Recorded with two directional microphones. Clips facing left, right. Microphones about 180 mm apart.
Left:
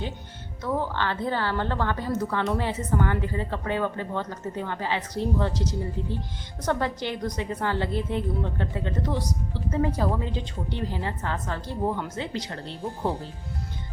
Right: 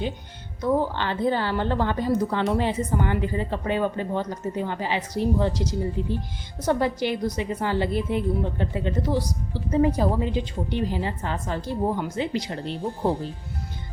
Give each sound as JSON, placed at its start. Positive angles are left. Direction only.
{"t": 0.6, "sound": "a woman's voice", "side_deg": -15}